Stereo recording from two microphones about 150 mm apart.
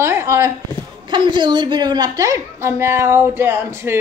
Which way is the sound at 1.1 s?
30° right (ahead or behind).